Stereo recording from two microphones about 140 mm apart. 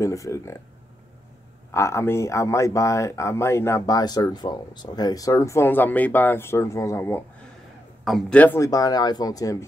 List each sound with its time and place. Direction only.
0.0 s speech: 20° left (ahead or behind)
1.7 s speech: 20° left (ahead or behind)
8.0 s a man's voice: centre (ahead or behind)
8.5 s speech: 25° left (ahead or behind)